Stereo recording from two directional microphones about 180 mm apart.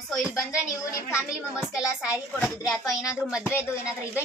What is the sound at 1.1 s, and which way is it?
Speech, 15° left (ahead or behind).